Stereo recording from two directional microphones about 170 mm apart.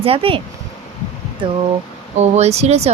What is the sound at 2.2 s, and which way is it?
Speech, 40° right (ahead or behind).